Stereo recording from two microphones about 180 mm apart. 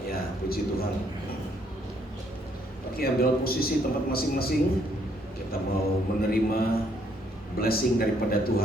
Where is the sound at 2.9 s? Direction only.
55° left (ahead or behind).